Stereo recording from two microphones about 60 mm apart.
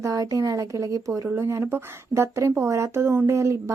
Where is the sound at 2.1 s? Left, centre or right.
Right.